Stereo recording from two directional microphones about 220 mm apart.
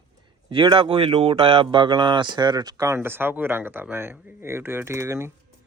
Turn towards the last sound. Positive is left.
turn(degrees=-10)  # may be behind; listen again after turning